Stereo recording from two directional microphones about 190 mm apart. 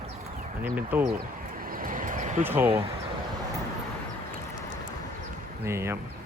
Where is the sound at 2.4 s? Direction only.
10° right (ahead or behind).